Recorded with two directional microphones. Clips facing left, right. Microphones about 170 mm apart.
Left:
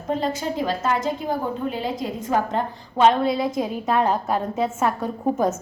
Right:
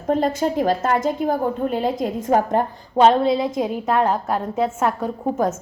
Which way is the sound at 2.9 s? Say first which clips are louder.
Right 3 dB; 30° right (ahead or behind).